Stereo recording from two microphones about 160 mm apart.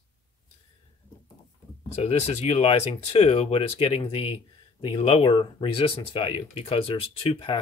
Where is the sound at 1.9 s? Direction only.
40° left (ahead or behind).